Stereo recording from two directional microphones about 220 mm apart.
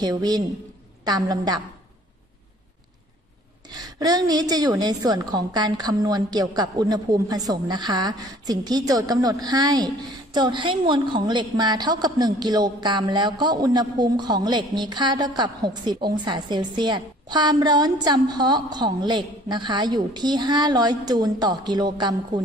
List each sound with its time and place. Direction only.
0.0 s a woman's voice: 20° right (ahead or behind)
3.6 s a woman's voice: 20° right (ahead or behind)